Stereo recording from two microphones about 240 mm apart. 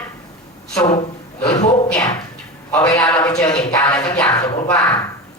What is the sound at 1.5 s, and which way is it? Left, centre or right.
Speech, left.